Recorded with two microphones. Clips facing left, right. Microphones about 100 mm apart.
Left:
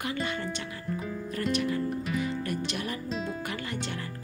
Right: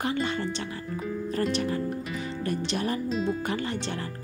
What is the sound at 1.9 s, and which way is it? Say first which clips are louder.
Music: left 2 dB; centre (ahead or behind).